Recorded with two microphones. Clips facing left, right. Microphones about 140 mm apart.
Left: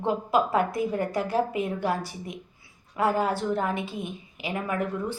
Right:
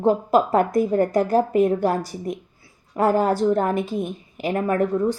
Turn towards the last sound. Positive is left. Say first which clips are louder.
# right 8 dB
turn(degrees=-40)  # may be behind; listen again after turning